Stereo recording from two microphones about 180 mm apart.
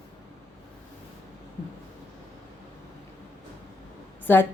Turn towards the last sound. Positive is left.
turn(degrees=10)  # may be behind; listen again after turning